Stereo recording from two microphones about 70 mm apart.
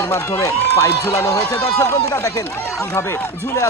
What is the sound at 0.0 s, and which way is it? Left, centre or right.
Speech, left.